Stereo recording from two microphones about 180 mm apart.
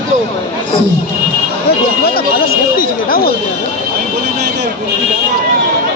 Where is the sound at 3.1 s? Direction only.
55° left (ahead or behind).